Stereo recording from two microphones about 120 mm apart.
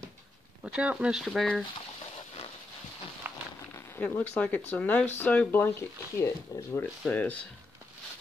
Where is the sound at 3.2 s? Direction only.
15° right (ahead or behind).